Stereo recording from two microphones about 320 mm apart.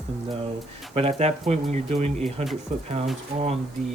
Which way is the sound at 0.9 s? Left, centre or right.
Centre.